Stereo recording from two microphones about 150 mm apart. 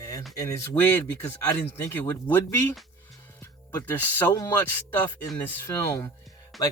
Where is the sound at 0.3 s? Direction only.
20° left (ahead or behind).